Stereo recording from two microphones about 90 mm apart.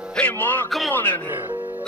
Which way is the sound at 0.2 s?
20° left (ahead or behind).